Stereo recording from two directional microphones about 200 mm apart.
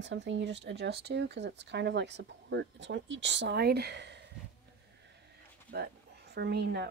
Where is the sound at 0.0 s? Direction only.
65° right (ahead or behind).